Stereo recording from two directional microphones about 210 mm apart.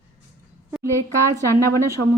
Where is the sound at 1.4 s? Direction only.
10° left (ahead or behind).